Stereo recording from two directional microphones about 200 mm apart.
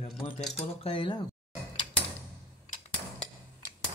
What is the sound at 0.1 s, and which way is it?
Speech, centre (ahead or behind).